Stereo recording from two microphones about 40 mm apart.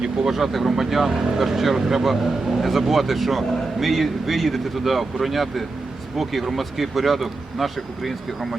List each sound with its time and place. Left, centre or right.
0.0 s speech: centre
0.3 s speech: centre